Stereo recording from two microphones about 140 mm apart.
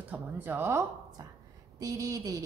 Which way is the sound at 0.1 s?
15° right (ahead or behind).